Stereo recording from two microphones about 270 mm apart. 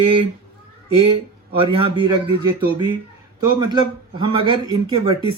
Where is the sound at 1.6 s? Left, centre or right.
Centre.